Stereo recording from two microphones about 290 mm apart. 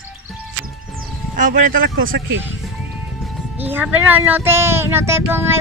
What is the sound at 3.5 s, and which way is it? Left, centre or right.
Speech, centre.